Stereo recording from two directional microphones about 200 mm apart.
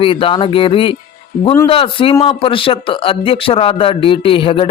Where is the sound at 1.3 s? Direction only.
45° left (ahead or behind).